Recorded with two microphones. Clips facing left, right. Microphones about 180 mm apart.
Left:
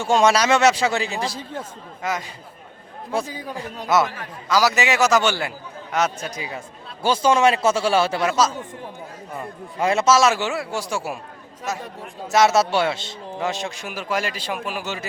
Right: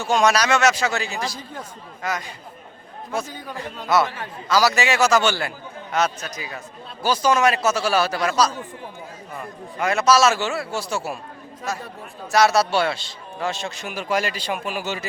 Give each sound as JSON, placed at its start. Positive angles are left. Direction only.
{"t": 0.0, "sound": "a man's voice", "side_deg": 25}
{"t": 3.3, "sound": "a man's voice", "side_deg": 10}
{"t": 6.1, "sound": "a man's voice", "side_deg": 25}
{"t": 12.3, "sound": "a man's voice", "side_deg": 20}
{"t": 13.9, "sound": "a man's voice", "side_deg": 0}